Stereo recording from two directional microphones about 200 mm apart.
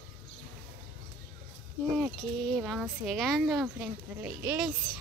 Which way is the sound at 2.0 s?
Centre (ahead or behind).